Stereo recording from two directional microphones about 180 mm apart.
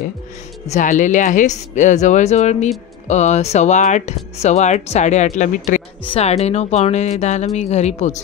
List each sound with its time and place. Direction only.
0.7 s speech: 45° left (ahead or behind)